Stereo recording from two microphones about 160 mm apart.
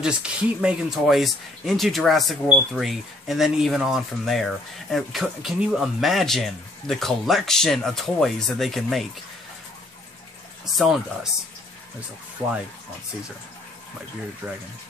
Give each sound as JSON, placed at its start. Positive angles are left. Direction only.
{"t": 0.0, "sound": "speech", "side_deg": -5}
{"t": 10.6, "sound": "speech", "side_deg": -5}